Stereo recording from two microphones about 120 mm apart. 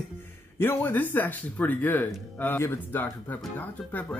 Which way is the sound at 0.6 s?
15° left (ahead or behind).